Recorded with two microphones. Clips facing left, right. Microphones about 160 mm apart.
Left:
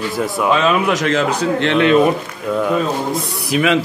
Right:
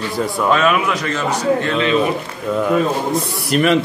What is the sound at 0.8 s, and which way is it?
Speech, 80° left.